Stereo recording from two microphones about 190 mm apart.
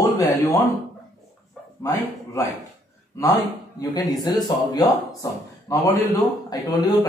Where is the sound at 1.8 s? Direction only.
15° left (ahead or behind).